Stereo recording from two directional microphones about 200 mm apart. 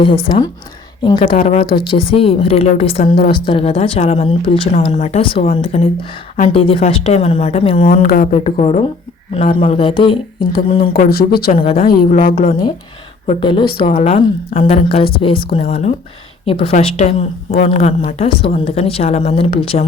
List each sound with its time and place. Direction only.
0.0 s speech: 25° left (ahead or behind)
1.4 s speech: 40° left (ahead or behind)
1.6 s speech: 25° left (ahead or behind)
7.9 s speech: 45° left (ahead or behind)
8.4 s speech: 30° left (ahead or behind)
11.1 s speech: 50° left (ahead or behind)
11.5 s speech: 30° left (ahead or behind)
11.9 s speech: 50° left (ahead or behind)
13.2 s speech: 25° left (ahead or behind)